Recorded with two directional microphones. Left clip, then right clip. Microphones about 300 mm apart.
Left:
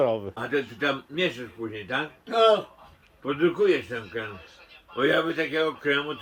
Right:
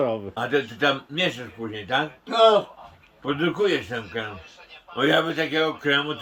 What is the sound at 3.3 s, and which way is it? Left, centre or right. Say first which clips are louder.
Speech: even; right.